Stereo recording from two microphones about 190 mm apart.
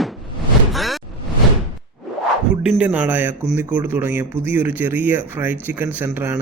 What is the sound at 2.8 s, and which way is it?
Speech, 10° right (ahead or behind).